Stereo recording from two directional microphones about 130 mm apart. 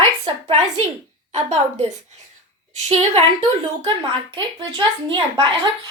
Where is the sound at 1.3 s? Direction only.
60° right (ahead or behind).